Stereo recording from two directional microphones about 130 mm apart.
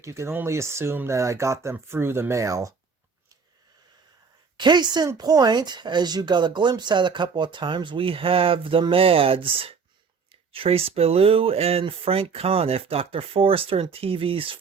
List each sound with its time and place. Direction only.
0.0 s speech: 20° right (ahead or behind)
4.5 s speech: 35° right (ahead or behind)